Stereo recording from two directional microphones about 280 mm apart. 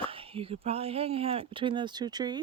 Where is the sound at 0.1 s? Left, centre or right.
Centre.